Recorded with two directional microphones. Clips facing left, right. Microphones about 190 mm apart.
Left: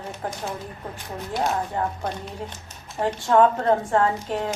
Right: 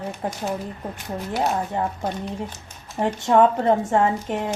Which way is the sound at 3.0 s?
20° right (ahead or behind).